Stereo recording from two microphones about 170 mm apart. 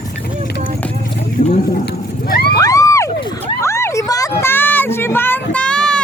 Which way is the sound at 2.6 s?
20° left (ahead or behind).